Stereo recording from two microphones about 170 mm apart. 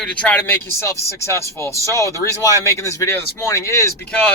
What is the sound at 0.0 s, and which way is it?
A man's voice, 5° left (ahead or behind).